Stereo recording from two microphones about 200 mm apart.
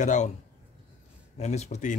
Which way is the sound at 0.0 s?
35° left (ahead or behind).